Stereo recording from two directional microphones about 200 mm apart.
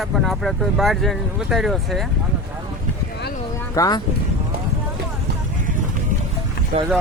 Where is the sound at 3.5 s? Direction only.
15° left (ahead or behind).